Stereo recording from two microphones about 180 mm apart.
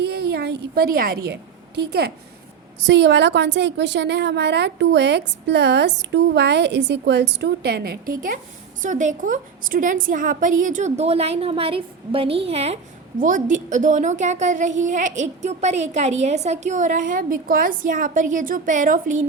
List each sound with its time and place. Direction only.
0.0 s a woman's voice: 60° right (ahead or behind)
2.8 s a woman's voice: 80° right; by 19.2 s 45° right (ahead or behind)